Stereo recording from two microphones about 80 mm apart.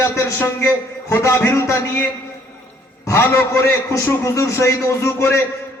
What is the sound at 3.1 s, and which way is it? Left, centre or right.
A man's voice, left.